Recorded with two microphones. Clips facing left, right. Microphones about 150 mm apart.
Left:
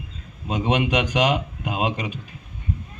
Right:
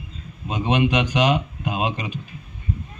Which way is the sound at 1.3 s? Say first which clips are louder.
Right 2 dB; 5° left (ahead or behind).